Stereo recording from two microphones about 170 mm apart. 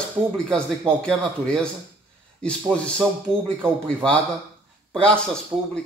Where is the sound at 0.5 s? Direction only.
5° left (ahead or behind).